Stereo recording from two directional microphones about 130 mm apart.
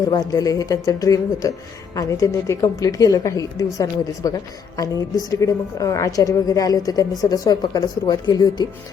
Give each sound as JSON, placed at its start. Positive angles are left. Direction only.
{"t": 0.1, "sound": "a woman's voice", "side_deg": 30}